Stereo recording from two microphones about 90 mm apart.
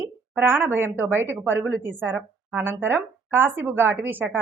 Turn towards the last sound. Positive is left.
turn(degrees=-20)  # may be behind; listen again after turning